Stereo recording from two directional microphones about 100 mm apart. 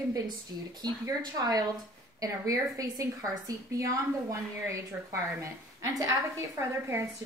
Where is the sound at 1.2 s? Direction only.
40° right (ahead or behind).